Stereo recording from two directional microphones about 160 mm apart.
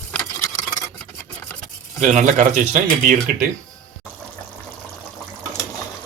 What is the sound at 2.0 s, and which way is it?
Speech, 50° right (ahead or behind).